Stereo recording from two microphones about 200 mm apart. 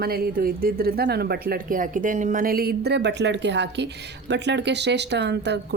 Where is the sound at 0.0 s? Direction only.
50° right (ahead or behind).